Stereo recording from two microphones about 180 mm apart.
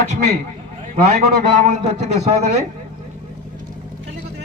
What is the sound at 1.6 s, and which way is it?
Speech, 40° right (ahead or behind).